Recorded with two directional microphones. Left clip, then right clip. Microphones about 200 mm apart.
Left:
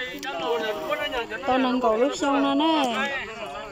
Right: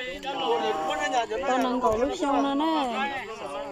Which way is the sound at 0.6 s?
35° right (ahead or behind).